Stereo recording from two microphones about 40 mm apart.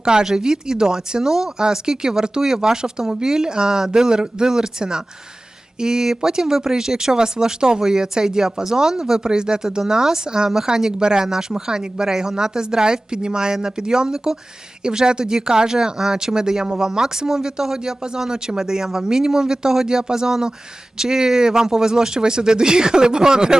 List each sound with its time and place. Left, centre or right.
0.0 s speech: centre